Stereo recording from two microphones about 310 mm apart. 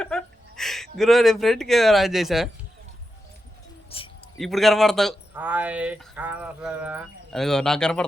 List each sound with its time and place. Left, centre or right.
0.0 s speech: centre
3.8 s a sound: centre
4.4 s speech: centre